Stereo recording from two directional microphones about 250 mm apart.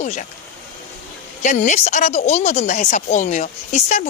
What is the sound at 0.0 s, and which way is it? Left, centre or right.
Speech, left.